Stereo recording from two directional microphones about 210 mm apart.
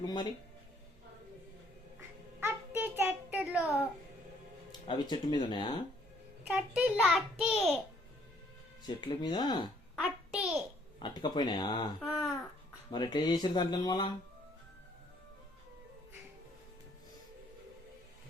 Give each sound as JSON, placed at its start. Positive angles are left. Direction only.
{"t": 0.0, "sound": "speech", "side_deg": 20}
{"t": 2.4, "sound": "child singing", "side_deg": -10}
{"t": 4.9, "sound": "speech", "side_deg": 20}
{"t": 6.5, "sound": "a child's voice", "side_deg": -5}
{"t": 9.0, "sound": "speech", "side_deg": 20}
{"t": 9.9, "sound": "a sound", "side_deg": 0}
{"t": 11.0, "sound": "speech", "side_deg": 20}
{"t": 11.9, "sound": "a child's voice", "side_deg": 0}
{"t": 12.9, "sound": "speech", "side_deg": 20}